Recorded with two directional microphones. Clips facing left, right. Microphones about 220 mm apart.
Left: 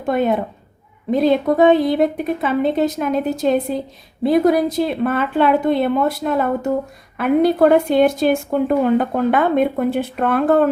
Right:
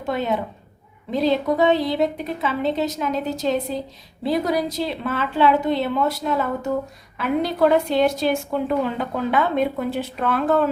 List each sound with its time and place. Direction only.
0.0 s a woman's voice: 50° left (ahead or behind)